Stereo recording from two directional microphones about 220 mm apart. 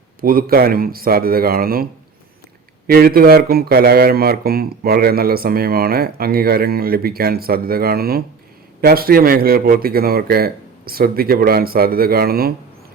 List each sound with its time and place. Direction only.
0.2 s speech: 40° right (ahead or behind)